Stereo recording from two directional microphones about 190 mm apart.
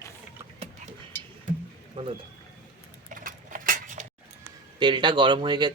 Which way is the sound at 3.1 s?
45° right (ahead or behind).